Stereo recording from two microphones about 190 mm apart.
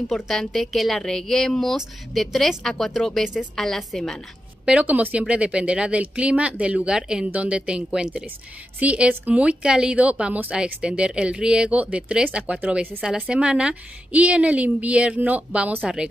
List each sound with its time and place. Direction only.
0.1 s a woman's voice: centre (ahead or behind)